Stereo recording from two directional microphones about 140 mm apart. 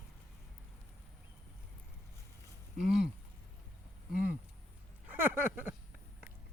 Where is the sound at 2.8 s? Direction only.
5° right (ahead or behind).